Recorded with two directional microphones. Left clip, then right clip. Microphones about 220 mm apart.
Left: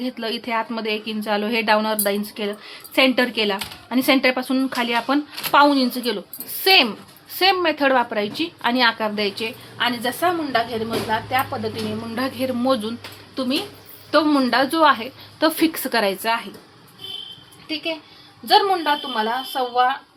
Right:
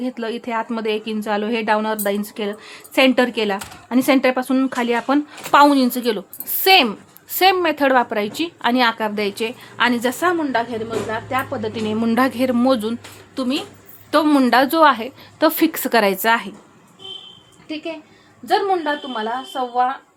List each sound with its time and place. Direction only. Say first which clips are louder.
0.0 s a woman's voice: right 1 dB; 15° right (ahead or behind); by 16.5 s 30° right (ahead or behind)
19.1 s a woman's voice: left 1 dB; 20° right (ahead or behind)